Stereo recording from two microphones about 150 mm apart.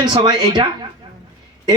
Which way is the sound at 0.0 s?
30° right (ahead or behind).